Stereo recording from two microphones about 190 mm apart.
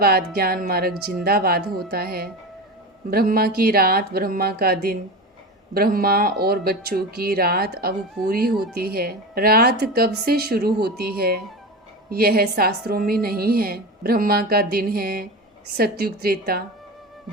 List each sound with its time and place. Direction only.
0.0 s a woman's voice: 55° right (ahead or behind)